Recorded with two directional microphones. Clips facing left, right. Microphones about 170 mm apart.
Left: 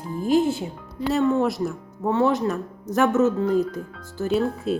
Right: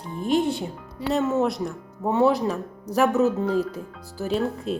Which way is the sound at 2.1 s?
15° right (ahead or behind).